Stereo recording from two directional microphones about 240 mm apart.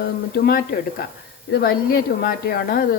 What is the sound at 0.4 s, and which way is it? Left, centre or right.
A woman's voice, left.